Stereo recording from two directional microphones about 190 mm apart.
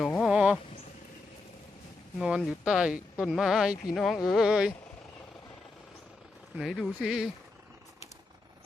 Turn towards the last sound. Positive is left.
turn(degrees=-5)  # may be behind; listen again after turning